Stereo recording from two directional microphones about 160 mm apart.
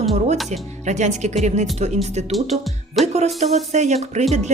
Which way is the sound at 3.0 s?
45° right (ahead or behind).